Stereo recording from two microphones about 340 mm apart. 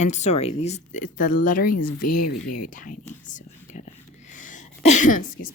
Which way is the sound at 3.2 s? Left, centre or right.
Left.